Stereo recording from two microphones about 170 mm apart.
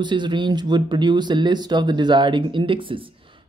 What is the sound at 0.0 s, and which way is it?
Speech, 25° right (ahead or behind).